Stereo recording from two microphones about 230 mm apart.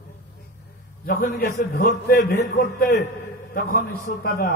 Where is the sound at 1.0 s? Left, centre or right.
Left.